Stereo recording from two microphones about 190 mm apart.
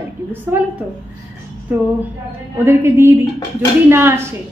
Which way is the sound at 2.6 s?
15° right (ahead or behind).